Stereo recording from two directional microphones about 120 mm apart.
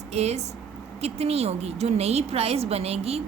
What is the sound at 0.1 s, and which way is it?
A woman's voice, 65° right (ahead or behind).